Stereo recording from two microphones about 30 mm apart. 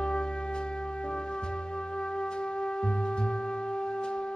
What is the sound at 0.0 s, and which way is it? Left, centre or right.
Music, left.